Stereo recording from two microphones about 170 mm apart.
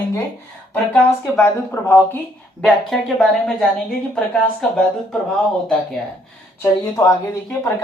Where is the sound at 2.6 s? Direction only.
Centre (ahead or behind).